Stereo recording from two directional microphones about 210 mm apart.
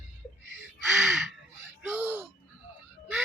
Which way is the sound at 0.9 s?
Centre (ahead or behind).